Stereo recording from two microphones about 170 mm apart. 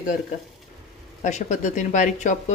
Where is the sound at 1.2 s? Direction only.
45° left (ahead or behind).